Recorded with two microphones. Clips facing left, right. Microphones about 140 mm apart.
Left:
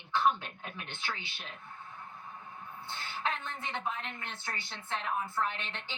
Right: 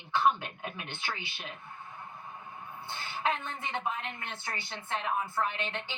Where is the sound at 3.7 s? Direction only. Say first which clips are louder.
Right 3 dB; 5° right (ahead or behind).